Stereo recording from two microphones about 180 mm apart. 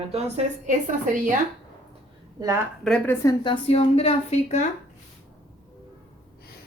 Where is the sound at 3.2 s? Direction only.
25° left (ahead or behind).